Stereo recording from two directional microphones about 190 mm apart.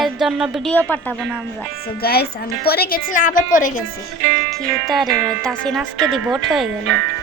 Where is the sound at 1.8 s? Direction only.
55° left (ahead or behind).